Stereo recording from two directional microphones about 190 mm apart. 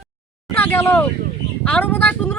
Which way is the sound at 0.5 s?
10° left (ahead or behind).